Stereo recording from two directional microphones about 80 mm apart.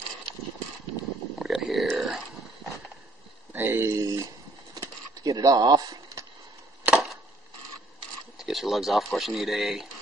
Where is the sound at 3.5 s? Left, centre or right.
Right.